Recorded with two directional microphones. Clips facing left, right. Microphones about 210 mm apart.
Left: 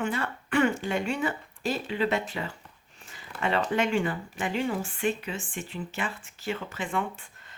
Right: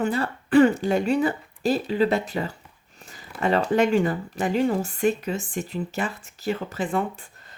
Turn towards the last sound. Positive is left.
turn(degrees=-35)  # may be behind; listen again after turning